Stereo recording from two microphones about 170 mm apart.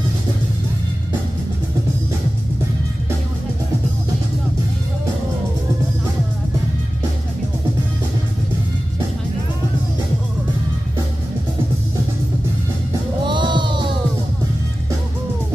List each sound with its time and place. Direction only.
13.2 s music: 30° right (ahead or behind)